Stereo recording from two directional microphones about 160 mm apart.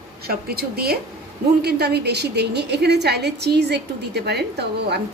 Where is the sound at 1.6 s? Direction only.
90° right.